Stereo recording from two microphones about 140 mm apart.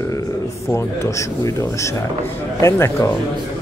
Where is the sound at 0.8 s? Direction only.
20° left (ahead or behind).